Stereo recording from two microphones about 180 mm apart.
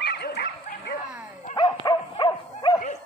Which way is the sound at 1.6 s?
25° left (ahead or behind).